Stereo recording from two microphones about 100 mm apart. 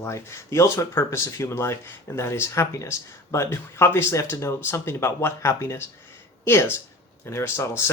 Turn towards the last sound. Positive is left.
turn(degrees=25)  # may be behind; listen again after turning